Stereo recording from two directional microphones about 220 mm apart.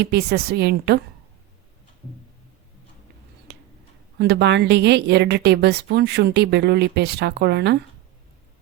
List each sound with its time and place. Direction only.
0.0 s speech: 45° right (ahead or behind)
3.5 s tick-tock: 50° right (ahead or behind)
4.2 s speech: 50° right (ahead or behind)